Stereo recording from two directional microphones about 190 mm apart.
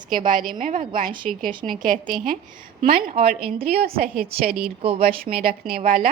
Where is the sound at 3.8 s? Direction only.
50° right (ahead or behind).